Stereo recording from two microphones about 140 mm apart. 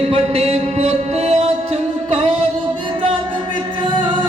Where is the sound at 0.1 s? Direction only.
45° right (ahead or behind).